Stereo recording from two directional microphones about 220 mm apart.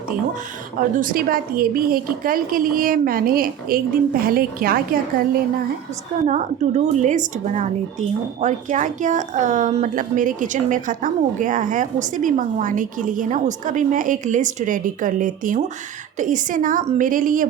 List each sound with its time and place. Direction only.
0.9 s a woman's voice: 40° right (ahead or behind)